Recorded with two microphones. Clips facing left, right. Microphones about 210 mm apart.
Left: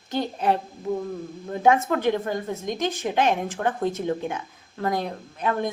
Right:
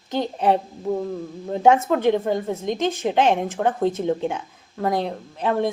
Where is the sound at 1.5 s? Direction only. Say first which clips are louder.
Right 3 dB; 20° right (ahead or behind).